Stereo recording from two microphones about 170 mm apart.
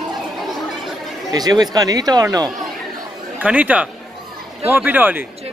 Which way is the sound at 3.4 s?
10° right (ahead or behind).